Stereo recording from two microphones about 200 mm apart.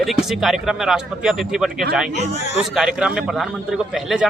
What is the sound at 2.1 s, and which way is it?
Speech, 35° left (ahead or behind).